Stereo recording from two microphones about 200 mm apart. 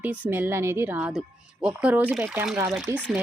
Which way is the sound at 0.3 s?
10° right (ahead or behind).